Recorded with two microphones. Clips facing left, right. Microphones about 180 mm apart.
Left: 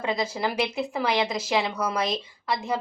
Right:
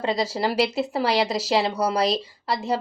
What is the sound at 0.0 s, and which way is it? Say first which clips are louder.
A woman's voice: right 3 dB; 30° right (ahead or behind).